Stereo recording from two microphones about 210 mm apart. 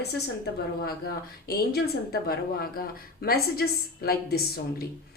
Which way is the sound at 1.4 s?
50° left (ahead or behind).